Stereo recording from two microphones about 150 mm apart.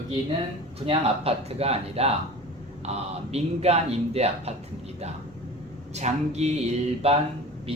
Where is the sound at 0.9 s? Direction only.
40° right (ahead or behind).